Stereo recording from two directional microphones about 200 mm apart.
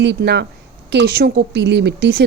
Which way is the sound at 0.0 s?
60° right (ahead or behind).